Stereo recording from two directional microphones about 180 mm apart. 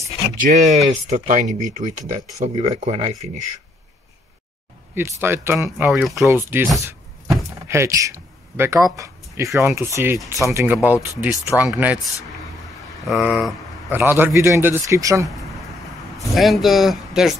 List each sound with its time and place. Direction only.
0.0 s speech: 40° right (ahead or behind)
4.9 s a man's voice: 10° right (ahead or behind)
5.9 s speech: centre (ahead or behind)
6.2 s a man's voice: 10° right (ahead or behind)
6.8 s a sound: 15° right (ahead or behind)
9.6 s a man's voice: 15° right (ahead or behind)
16.3 s speech: centre (ahead or behind)